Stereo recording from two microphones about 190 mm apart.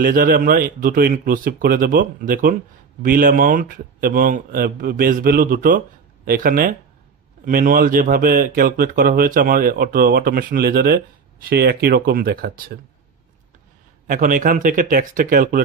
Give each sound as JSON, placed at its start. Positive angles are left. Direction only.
{"t": 0.0, "sound": "speech", "side_deg": -50}
{"t": 14.0, "sound": "speech", "side_deg": -45}